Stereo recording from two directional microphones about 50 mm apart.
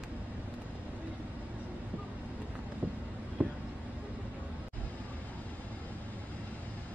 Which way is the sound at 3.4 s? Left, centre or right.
Right.